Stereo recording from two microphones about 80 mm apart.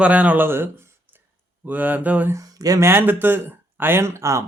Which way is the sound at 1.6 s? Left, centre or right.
Right.